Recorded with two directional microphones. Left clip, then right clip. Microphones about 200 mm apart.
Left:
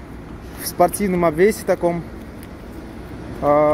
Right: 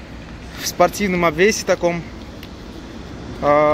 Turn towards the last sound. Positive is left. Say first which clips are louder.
# right 1 dB
turn(degrees=5)  # may be behind; listen again after turning